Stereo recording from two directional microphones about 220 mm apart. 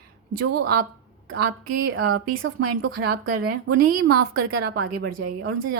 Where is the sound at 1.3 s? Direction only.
45° right (ahead or behind).